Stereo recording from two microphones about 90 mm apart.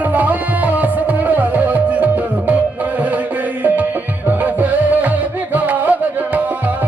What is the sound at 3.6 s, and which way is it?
Music, 20° right (ahead or behind).